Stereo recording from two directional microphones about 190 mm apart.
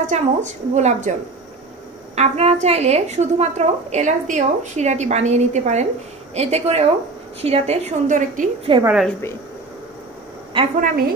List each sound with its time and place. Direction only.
0.0 s a woman's voice: 40° right (ahead or behind)
2.1 s a woman's voice: 35° right (ahead or behind)
8.7 s a woman's voice: 25° right (ahead or behind)
10.6 s a woman's voice: 30° right (ahead or behind)